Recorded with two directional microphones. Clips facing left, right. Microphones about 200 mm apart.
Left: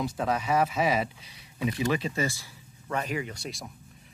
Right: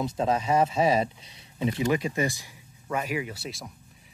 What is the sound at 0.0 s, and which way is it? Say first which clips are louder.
Speech: right 3 dB; 25° right (ahead or behind).